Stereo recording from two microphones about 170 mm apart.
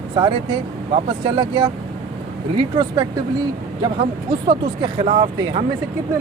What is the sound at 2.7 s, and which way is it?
Speech, 25° right (ahead or behind).